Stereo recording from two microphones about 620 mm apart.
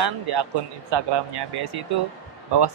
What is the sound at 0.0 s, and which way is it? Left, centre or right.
Speech, right.